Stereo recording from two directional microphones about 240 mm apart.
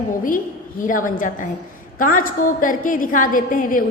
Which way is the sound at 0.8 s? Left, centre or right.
Left.